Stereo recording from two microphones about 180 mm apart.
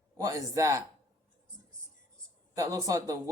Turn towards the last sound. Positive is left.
turn(degrees=-20)  # may be behind; listen again after turning